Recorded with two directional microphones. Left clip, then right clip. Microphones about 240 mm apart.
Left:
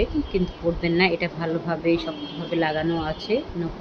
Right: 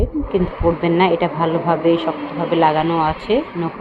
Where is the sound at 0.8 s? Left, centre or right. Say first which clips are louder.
Right 5 dB; centre.